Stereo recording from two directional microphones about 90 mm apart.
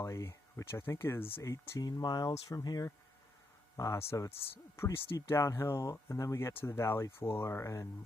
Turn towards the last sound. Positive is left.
turn(degrees=30)  # may be behind; listen again after turning